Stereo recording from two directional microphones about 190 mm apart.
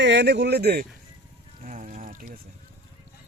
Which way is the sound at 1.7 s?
40° right (ahead or behind).